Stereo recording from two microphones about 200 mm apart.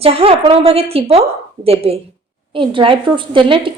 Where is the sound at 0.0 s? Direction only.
30° right (ahead or behind).